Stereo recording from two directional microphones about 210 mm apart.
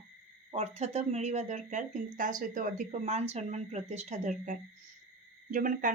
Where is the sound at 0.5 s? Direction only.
30° right (ahead or behind).